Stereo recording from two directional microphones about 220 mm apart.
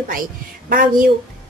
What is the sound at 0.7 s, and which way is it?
Speech, 40° right (ahead or behind).